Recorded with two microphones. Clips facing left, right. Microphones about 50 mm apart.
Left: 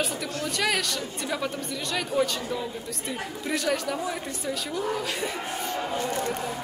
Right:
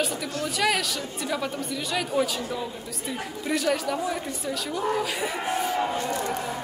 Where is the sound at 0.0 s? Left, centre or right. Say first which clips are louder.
Right 1 dB; centre.